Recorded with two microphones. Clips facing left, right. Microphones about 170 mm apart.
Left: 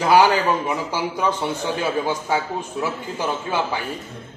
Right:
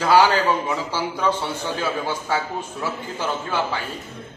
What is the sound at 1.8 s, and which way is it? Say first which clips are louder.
Speech: left 2 dB; 20° left (ahead or behind).